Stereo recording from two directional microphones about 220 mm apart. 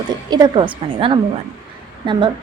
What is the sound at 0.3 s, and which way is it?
A woman's voice, 20° right (ahead or behind).